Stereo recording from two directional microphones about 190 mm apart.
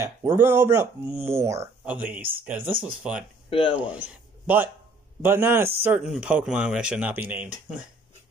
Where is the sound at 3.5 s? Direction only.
25° left (ahead or behind).